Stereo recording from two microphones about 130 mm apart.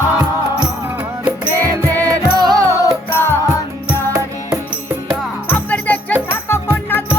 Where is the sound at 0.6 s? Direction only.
15° right (ahead or behind).